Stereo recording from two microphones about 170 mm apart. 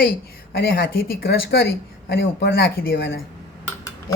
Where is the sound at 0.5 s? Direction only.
65° left (ahead or behind).